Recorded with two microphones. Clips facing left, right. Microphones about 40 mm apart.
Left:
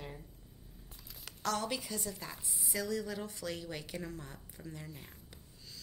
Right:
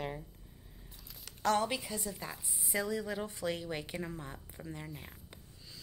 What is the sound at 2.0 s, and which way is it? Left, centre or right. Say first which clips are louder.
Speech: right 1 dB; centre.